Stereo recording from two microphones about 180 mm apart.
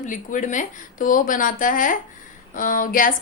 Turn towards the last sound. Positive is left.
turn(degrees=50)  # may be behind; listen again after turning